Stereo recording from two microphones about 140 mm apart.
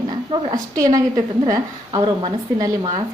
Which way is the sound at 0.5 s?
25° right (ahead or behind).